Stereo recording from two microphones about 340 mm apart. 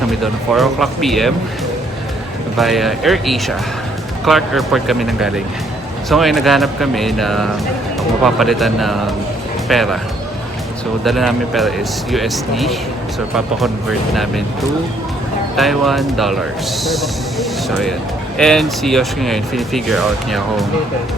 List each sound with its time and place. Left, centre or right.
0.1 s speech: centre
2.6 s speech: centre
11.0 s speech: centre
15.5 s speech: centre